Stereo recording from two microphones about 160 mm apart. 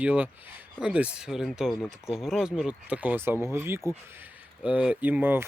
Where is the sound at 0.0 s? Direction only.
10° right (ahead or behind).